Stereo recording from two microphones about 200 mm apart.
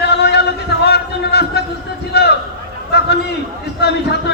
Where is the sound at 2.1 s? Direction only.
55° left (ahead or behind).